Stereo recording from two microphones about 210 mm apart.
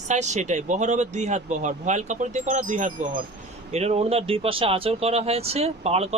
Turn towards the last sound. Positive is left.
turn(degrees=-30)  # may be behind; listen again after turning